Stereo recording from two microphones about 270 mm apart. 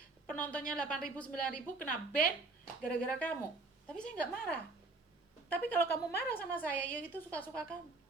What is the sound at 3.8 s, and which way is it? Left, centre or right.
Speech, centre.